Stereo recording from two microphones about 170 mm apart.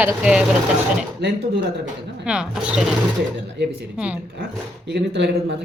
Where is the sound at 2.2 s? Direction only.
5° right (ahead or behind).